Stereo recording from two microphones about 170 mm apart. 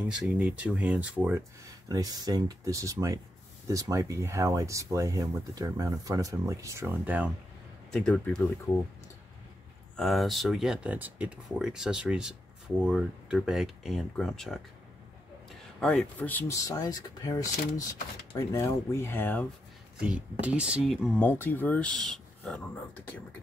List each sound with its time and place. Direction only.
0.1 s speech: 5° right (ahead or behind)
7.9 s speech: 5° left (ahead or behind)
9.9 s speech: centre (ahead or behind)
15.8 s speech: 5° left (ahead or behind)
20.0 s speech: 5° right (ahead or behind)
21.3 s speech: 10° left (ahead or behind)